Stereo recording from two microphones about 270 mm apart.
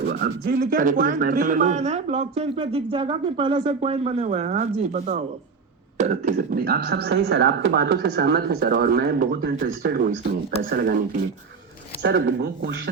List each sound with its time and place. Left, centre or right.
0.0 s speech: right
12.0 s speech: right